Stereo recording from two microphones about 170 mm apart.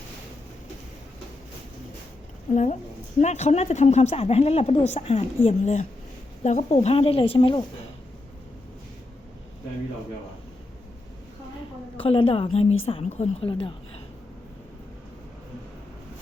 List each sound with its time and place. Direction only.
2.5 s a woman's voice: 45° left (ahead or behind); by 7.6 s 30° left (ahead or behind)
11.9 s a woman's voice: 35° left (ahead or behind)